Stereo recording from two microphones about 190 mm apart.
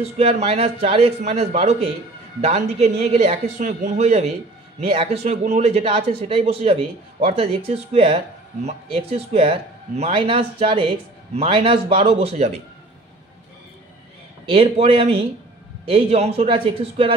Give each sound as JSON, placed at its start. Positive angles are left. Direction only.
{"t": 0.0, "sound": "speech", "side_deg": -35}
{"t": 14.4, "sound": "speech", "side_deg": -30}